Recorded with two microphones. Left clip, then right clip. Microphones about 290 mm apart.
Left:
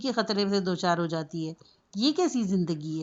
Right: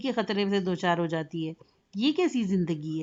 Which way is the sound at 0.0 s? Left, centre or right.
Centre.